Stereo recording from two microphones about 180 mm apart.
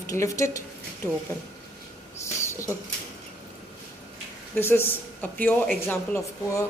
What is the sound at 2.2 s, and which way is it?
Rodents, 15° left (ahead or behind).